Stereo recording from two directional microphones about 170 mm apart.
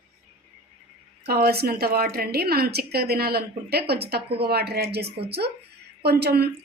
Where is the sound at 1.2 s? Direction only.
65° right (ahead or behind).